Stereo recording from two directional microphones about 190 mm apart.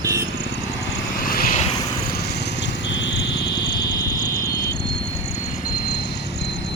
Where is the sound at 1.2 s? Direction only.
50° left (ahead or behind).